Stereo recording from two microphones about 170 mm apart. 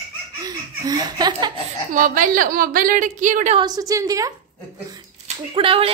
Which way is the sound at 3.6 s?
20° right (ahead or behind).